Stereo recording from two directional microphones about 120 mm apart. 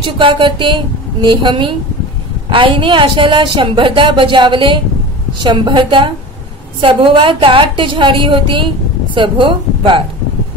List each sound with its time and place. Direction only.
0.0 s a woman's voice: 45° right (ahead or behind)